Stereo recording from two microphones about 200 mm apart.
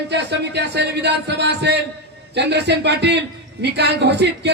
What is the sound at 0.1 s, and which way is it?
Speech, 60° right (ahead or behind).